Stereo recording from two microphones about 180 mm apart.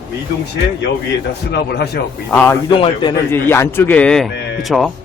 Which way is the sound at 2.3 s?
10° left (ahead or behind).